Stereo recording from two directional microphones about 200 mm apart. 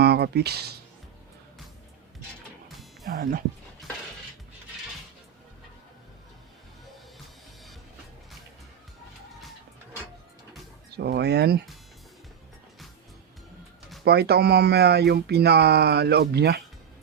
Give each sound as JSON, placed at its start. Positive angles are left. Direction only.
{"t": 0.0, "sound": "speech", "side_deg": -55}
{"t": 2.6, "sound": "music", "side_deg": 0}
{"t": 3.1, "sound": "speech", "side_deg": -45}
{"t": 10.9, "sound": "speech", "side_deg": -55}
{"t": 14.0, "sound": "speech", "side_deg": -55}